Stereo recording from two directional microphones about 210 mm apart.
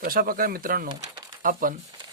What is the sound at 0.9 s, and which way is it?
Pigeon, 20° right (ahead or behind).